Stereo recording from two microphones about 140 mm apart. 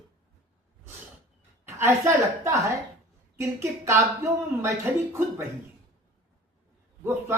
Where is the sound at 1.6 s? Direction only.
15° right (ahead or behind).